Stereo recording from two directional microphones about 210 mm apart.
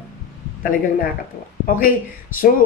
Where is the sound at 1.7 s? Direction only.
40° left (ahead or behind).